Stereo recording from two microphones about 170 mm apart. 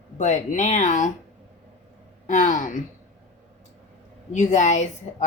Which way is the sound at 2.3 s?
45° left (ahead or behind).